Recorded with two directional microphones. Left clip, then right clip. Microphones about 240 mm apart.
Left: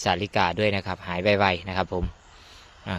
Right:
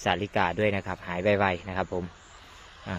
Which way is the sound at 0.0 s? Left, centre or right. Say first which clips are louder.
Left 3 dB; centre.